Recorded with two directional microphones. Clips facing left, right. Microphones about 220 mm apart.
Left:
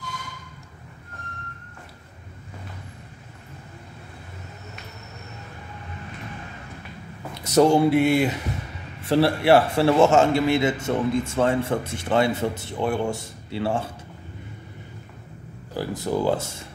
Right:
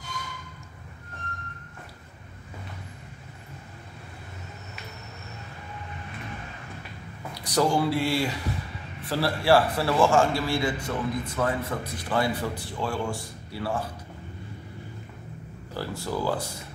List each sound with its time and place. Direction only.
7.3 s a man's voice: 25° left (ahead or behind)
15.7 s a man's voice: 15° left (ahead or behind)